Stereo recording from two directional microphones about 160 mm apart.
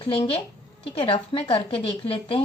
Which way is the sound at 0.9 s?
35° left (ahead or behind).